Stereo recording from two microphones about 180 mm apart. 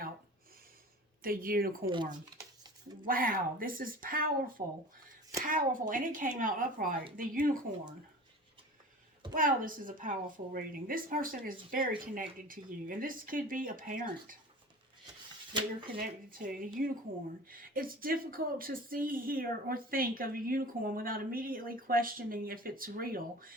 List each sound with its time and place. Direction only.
1.2 s speech: 50° right (ahead or behind)
3.0 s speech: 50° right (ahead or behind)
9.3 s speech: 50° right (ahead or behind)
16.0 s speech: 50° right (ahead or behind)